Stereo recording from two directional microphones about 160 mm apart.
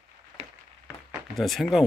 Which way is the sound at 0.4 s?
40° right (ahead or behind).